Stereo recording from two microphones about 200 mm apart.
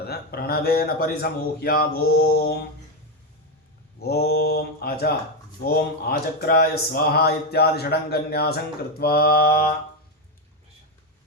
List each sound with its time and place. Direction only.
0.0 s speech: 50° left (ahead or behind)
4.0 s speech: 50° left (ahead or behind)